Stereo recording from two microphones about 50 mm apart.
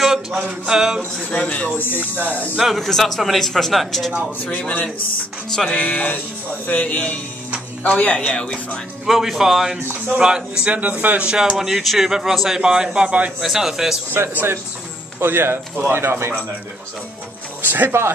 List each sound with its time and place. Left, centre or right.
0.0 s a sound: centre
1.3 s a man's voice: left
2.0 s speech: right
2.6 s speech: centre
5.8 s a man's voice: left
8.3 s speech: centre
9.0 s speech: centre
10.7 s a man's voice: right
11.2 s a man's voice: centre
11.5 s speech: centre; by 13.3 s right
13.4 s speech: centre
14.1 s a man's voice: right
17.6 s speech: right